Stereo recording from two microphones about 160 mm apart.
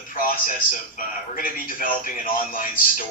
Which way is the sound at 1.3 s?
60° left (ahead or behind).